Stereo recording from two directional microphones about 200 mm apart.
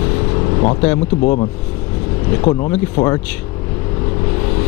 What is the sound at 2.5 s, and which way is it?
Speech, 30° left (ahead or behind).